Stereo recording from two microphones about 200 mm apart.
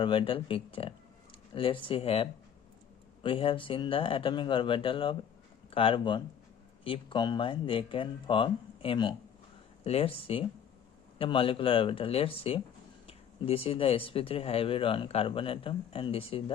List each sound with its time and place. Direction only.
0.0 s speech: 25° left (ahead or behind)